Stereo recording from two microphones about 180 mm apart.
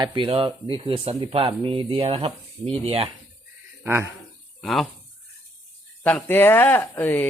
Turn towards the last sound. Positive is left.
turn(degrees=10)  # may be behind; listen again after turning